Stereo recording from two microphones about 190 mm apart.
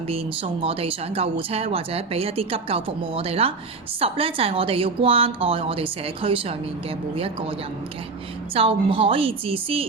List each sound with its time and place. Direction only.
0.1 s a woman's voice: 30° right (ahead or behind)
8.5 s a woman's voice: 30° right (ahead or behind)